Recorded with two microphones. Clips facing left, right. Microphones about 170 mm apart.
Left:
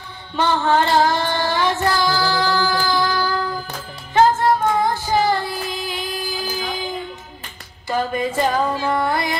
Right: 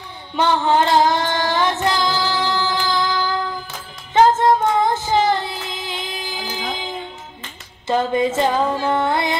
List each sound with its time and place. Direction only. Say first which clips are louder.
0.4 s child singing: right 1 dB; 15° right (ahead or behind)
7.9 s music: right 3 dB; 25° right (ahead or behind)